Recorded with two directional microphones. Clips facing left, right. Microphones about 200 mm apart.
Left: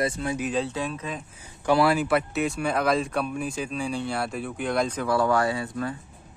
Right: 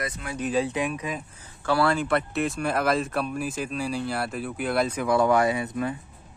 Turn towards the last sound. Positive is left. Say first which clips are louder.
# right 2 dB
turn(degrees=-20)  # may be behind; listen again after turning